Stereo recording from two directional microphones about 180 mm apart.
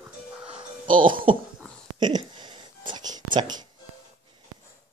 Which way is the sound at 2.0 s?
25° right (ahead or behind).